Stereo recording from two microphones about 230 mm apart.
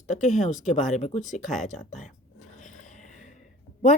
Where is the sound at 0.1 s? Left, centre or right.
Left.